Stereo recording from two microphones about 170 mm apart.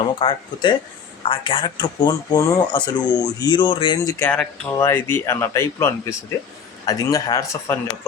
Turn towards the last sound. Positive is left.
turn(degrees=20)  # may be behind; listen again after turning